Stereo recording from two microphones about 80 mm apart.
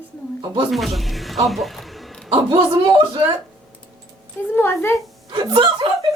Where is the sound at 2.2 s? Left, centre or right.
Right.